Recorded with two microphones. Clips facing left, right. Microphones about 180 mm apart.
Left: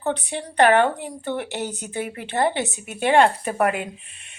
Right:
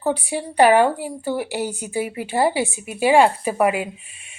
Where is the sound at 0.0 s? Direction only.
10° right (ahead or behind).